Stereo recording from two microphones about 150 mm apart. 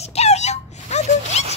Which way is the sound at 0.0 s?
45° left (ahead or behind).